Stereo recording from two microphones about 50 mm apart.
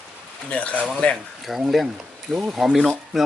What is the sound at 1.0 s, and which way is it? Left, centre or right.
Speech, left.